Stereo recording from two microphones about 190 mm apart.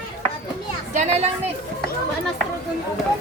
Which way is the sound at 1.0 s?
35° right (ahead or behind).